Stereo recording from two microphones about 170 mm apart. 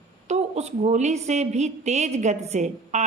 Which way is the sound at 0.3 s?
40° right (ahead or behind).